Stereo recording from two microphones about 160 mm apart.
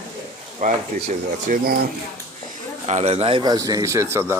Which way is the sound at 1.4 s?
65° right (ahead or behind).